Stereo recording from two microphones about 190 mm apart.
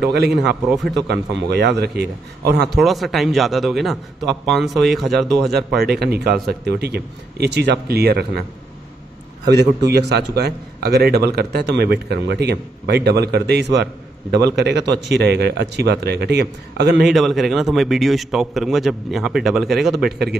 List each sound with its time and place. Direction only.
0.0 s a man's voice: 60° right (ahead or behind)
2.7 s a man's voice: centre (ahead or behind)
5.5 s a man's voice: 55° right (ahead or behind)
9.8 s a man's voice: 60° right (ahead or behind)
17.0 s a man's voice: centre (ahead or behind)
20.1 s a man's voice: 60° right (ahead or behind)